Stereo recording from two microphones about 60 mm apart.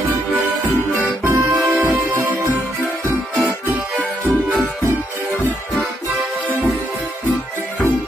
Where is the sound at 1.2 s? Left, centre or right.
Right.